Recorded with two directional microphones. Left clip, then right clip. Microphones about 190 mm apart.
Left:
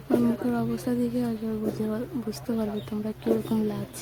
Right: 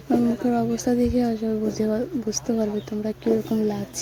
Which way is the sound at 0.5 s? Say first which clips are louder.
Right 6 dB; 25° right (ahead or behind).